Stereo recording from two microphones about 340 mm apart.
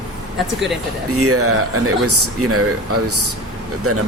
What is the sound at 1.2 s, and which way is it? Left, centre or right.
Speech, right.